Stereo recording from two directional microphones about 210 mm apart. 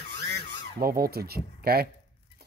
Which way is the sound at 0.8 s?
45° right (ahead or behind).